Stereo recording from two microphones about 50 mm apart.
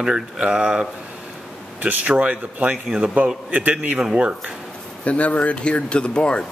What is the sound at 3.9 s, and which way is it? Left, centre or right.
Speech, centre.